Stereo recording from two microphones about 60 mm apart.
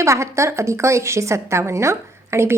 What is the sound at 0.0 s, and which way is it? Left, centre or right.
A woman's voice, right.